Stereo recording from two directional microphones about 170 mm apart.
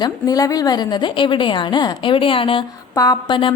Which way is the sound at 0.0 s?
20° left (ahead or behind).